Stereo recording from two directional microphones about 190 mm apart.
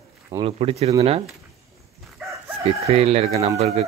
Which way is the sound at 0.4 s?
30° right (ahead or behind).